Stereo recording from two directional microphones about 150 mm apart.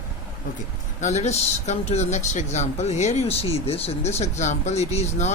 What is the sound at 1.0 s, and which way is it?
Speech, 50° left (ahead or behind).